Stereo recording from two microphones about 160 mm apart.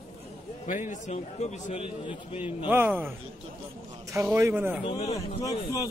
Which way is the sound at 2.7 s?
10° right (ahead or behind).